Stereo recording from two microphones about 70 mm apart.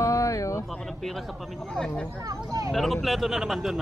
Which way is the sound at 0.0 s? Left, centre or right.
Left.